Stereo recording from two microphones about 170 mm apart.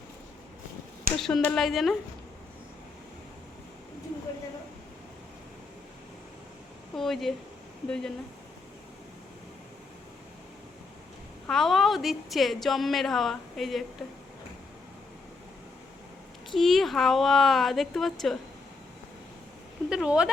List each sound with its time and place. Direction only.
1.1 s a sound: 60° right (ahead or behind)
1.5 s a woman's voice: centre (ahead or behind)
6.9 s a sound: centre (ahead or behind)
7.9 s a woman's voice: 5° left (ahead or behind)
11.4 s a woman's voice: centre (ahead or behind)
16.5 s a woman's voice: centre (ahead or behind)
19.9 s a woman's voice: 5° right (ahead or behind)